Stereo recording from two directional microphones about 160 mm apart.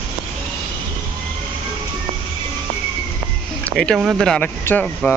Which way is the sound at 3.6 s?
5° left (ahead or behind).